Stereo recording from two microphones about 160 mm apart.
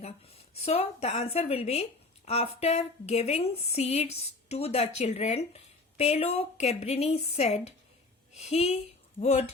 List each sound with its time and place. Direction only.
0.5 s speech: 40° left (ahead or behind)